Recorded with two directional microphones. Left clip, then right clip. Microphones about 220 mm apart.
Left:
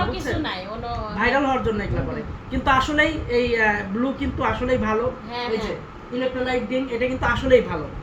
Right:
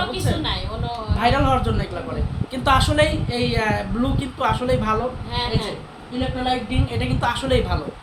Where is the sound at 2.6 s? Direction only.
30° right (ahead or behind).